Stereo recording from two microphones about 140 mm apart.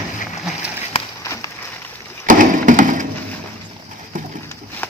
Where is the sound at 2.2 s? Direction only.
70° right (ahead or behind).